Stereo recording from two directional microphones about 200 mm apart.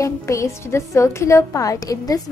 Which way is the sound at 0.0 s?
15° left (ahead or behind).